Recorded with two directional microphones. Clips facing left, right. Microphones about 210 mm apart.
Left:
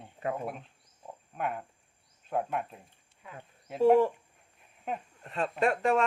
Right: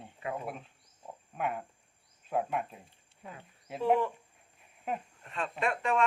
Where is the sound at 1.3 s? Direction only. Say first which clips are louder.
Even; centre (ahead or behind).